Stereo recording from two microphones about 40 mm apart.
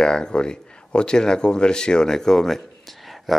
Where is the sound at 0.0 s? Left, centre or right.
Centre.